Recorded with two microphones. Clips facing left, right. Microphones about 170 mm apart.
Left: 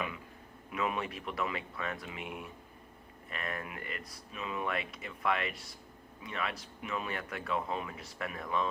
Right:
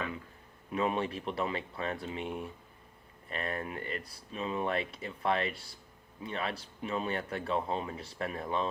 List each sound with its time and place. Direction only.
0.7 s speech: 35° right (ahead or behind)